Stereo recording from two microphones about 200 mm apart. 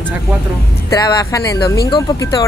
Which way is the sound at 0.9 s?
20° left (ahead or behind).